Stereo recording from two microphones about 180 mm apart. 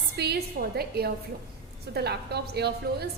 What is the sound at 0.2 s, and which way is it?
A woman's voice, 60° right (ahead or behind).